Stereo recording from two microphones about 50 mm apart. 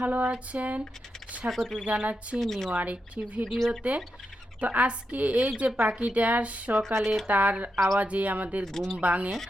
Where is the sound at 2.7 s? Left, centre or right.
Right.